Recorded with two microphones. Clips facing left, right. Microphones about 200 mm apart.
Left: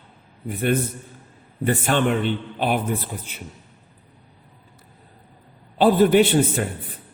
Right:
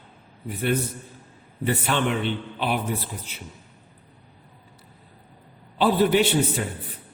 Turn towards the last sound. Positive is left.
turn(degrees=50)  # may be behind; listen again after turning